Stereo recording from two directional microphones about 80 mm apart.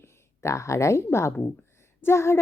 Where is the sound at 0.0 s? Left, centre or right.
Left.